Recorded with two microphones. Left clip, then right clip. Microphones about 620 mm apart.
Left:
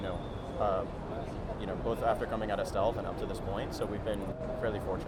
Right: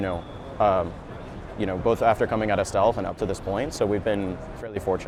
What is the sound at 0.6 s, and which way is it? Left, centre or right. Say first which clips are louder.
Speech: right 11 dB; right.